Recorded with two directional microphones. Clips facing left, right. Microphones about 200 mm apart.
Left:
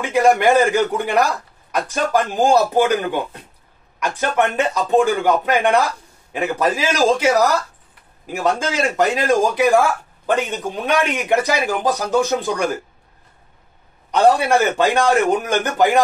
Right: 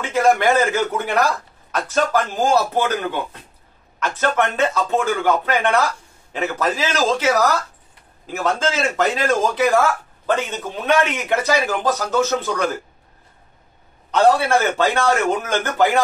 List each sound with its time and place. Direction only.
0.0 s a man's voice: 15° left (ahead or behind)
14.1 s a man's voice: 15° left (ahead or behind)